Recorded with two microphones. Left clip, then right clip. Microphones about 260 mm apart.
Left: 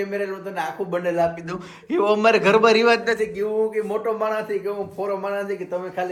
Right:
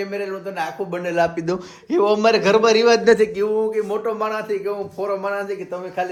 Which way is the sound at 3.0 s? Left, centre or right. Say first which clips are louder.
Right 8 dB; right.